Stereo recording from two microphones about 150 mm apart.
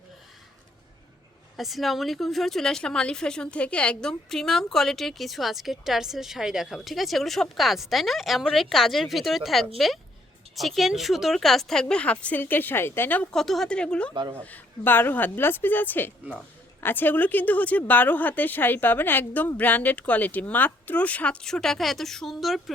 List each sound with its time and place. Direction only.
1.5 s speech: centre (ahead or behind)
14.1 s speech: 30° right (ahead or behind)
14.4 s a woman's voice: 10° left (ahead or behind)